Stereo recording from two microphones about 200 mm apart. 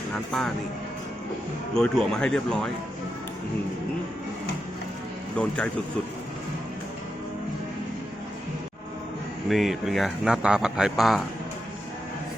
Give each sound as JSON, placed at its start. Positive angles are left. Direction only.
{"t": 0.1, "sound": "speech", "side_deg": 5}
{"t": 1.7, "sound": "a man's voice", "side_deg": 0}
{"t": 5.4, "sound": "speech", "side_deg": 5}
{"t": 9.5, "sound": "a man's voice", "side_deg": 0}